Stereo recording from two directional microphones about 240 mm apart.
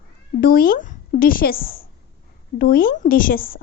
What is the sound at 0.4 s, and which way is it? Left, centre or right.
A woman's voice, left.